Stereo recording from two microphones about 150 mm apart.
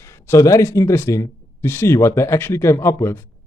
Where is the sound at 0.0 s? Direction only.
20° left (ahead or behind).